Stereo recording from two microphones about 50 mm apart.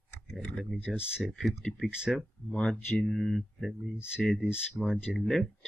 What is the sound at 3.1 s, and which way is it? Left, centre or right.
Speech, centre.